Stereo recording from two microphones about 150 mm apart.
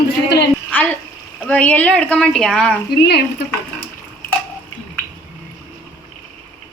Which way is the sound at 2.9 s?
90° left.